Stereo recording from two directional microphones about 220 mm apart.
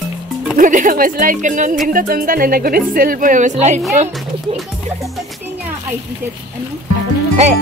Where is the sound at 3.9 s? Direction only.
30° right (ahead or behind).